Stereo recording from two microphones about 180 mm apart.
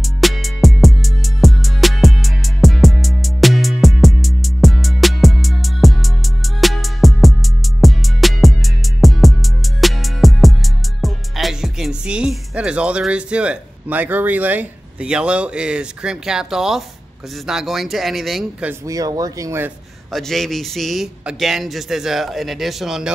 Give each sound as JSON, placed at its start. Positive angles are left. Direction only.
{"t": 0.0, "sound": "music", "side_deg": 0}
{"t": 17.5, "sound": "a man's voice", "side_deg": 0}
{"t": 18.7, "sound": "speech", "side_deg": -20}
{"t": 20.1, "sound": "a man's voice", "side_deg": 0}